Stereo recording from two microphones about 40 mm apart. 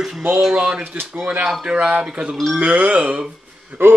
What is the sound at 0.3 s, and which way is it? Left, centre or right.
Speech, centre.